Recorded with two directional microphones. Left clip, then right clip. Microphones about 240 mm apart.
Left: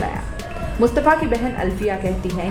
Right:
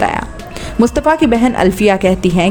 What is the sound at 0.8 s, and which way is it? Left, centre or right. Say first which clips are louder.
Speech: right 4 dB; right.